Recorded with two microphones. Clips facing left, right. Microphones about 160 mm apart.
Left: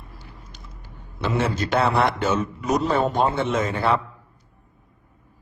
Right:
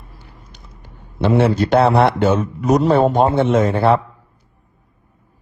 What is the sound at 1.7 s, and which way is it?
Speech, 40° right (ahead or behind).